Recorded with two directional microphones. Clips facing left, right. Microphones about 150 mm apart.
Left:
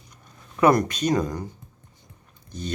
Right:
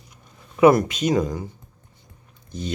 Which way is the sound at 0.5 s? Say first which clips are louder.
Right 4 dB; 10° right (ahead or behind).